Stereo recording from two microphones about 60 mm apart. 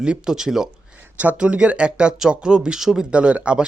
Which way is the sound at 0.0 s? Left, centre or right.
Centre.